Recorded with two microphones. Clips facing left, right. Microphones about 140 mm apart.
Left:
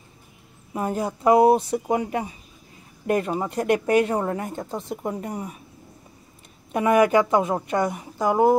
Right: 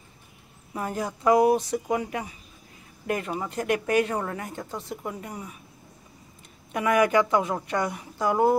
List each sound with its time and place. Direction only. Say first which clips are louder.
0.7 s a woman's voice: left 4 dB; 20° left (ahead or behind)
5.0 s a woman's voice: left 6 dB; 35° left (ahead or behind)
6.7 s speech: left 4 dB; 25° left (ahead or behind)